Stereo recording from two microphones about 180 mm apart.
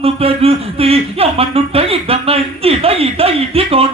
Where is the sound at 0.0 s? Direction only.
30° right (ahead or behind).